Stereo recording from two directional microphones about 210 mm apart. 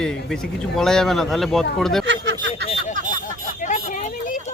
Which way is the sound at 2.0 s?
55° right (ahead or behind).